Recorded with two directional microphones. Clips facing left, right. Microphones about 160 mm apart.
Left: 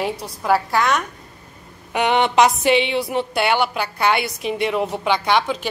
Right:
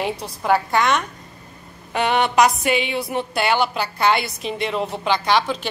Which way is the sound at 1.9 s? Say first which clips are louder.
Left 1 dB; 15° left (ahead or behind).